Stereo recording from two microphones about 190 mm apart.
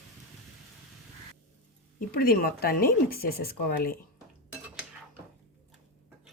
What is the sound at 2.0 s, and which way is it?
Speech, 50° left (ahead or behind).